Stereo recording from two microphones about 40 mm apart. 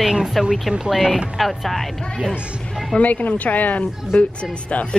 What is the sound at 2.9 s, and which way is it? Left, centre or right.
Speech, left.